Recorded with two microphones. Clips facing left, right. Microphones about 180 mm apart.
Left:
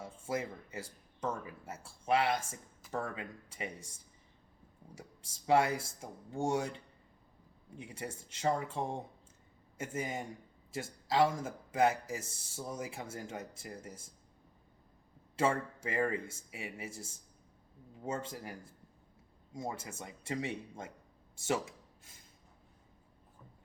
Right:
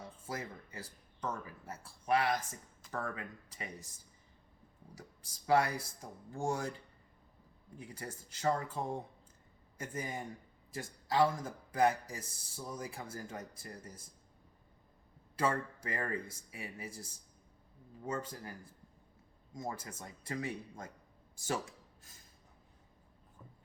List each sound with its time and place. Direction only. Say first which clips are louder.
0.2 s a man's voice: left 6 dB; 25° left (ahead or behind)
5.2 s a man's voice: left 1 dB; 25° left (ahead or behind)
7.8 s a man's voice: left 3 dB; 25° left (ahead or behind)
15.4 s a man's voice: left 2 dB; 25° left (ahead or behind)
19.5 s a man's voice: left 2 dB; 25° left (ahead or behind)
21.3 s a sound: left 3 dB; 20° left (ahead or behind)